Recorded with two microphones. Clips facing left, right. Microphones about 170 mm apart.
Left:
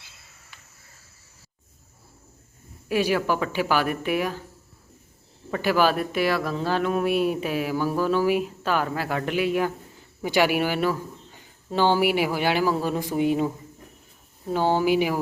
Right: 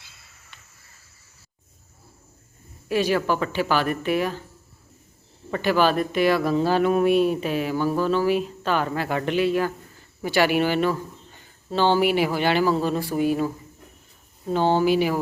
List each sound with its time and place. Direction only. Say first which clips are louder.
0.5 s cricket: even; 5° left (ahead or behind)
2.9 s speech: right 1 dB; 10° left (ahead or behind)
5.5 s speech: right 1 dB; 5° left (ahead or behind)
7.1 s speech: right 3 dB; 10° left (ahead or behind)
14.5 s speech: right 2 dB; 10° left (ahead or behind)